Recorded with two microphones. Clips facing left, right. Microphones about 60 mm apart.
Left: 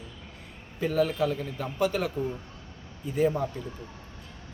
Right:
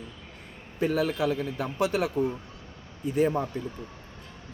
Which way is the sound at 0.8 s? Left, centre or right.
Right.